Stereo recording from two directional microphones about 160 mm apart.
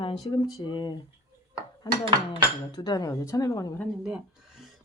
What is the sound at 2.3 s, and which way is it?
Speech, 25° left (ahead or behind).